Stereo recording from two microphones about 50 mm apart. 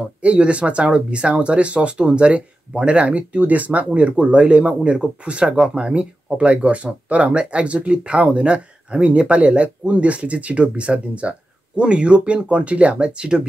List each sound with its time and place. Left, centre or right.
0.2 s speech: right